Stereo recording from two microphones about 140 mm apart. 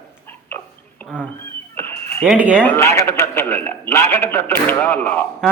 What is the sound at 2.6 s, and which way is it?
A man's voice, 15° left (ahead or behind).